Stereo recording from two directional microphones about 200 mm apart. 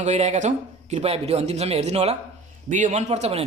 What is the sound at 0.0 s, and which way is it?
Speech, 35° right (ahead or behind).